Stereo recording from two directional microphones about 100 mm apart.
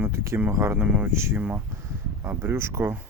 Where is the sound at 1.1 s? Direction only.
25° right (ahead or behind).